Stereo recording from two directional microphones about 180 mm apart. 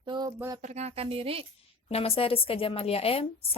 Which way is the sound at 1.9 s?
35° left (ahead or behind).